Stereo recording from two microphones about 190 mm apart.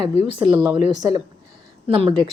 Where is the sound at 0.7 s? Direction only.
25° right (ahead or behind).